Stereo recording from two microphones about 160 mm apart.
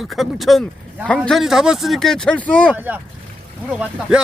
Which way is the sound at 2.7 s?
10° right (ahead or behind).